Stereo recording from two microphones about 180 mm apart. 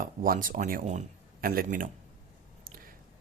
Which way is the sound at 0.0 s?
50° right (ahead or behind).